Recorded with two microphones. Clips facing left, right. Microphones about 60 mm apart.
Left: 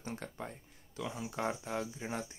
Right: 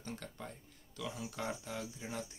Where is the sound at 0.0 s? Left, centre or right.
Left.